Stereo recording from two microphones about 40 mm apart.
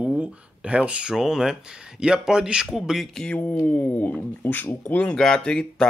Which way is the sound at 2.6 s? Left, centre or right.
Centre.